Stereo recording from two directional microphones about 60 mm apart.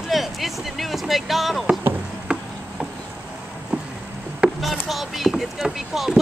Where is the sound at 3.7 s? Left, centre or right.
Right.